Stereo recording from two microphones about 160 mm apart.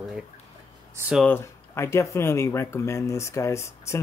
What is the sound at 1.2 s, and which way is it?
Speech, 15° left (ahead or behind).